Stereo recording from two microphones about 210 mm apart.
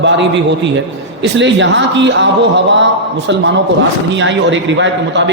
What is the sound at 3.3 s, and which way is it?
A man's voice, 60° right (ahead or behind).